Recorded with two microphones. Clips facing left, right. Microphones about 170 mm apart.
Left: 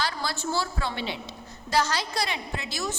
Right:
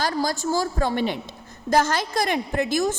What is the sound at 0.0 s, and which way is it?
A woman's voice, 45° right (ahead or behind).